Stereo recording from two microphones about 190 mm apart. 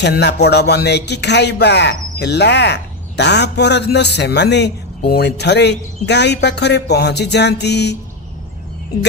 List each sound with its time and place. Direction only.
0.0 s a man's voice: 65° left (ahead or behind)